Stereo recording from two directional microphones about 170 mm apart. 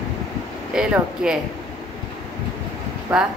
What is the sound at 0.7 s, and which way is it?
Speech, 5° right (ahead or behind).